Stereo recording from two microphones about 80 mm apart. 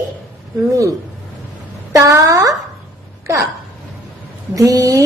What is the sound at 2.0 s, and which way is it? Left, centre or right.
Speech, right.